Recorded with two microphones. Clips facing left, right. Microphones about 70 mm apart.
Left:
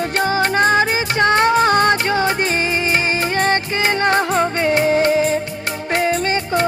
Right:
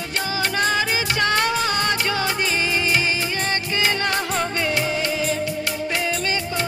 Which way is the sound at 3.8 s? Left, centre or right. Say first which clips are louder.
Left 6 dB; left.